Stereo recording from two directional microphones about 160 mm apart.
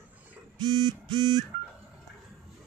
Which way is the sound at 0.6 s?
25° right (ahead or behind).